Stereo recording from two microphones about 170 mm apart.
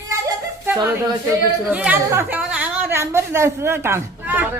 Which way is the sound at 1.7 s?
10° right (ahead or behind).